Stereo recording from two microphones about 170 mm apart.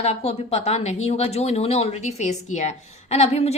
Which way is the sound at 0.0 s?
35° left (ahead or behind).